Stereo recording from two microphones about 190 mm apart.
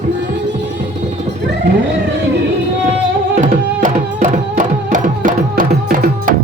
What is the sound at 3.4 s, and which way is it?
Music, 40° right (ahead or behind).